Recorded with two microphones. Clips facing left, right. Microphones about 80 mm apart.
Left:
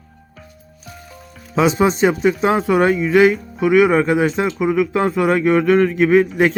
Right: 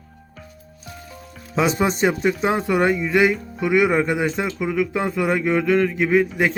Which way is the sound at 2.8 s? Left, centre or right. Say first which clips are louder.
Left 5 dB; left.